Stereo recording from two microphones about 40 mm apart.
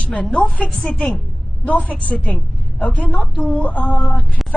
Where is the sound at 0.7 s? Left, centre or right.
Left.